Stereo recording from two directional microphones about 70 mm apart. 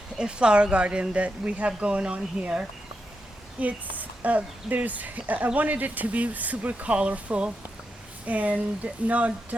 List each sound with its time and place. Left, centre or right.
0.2 s speech: centre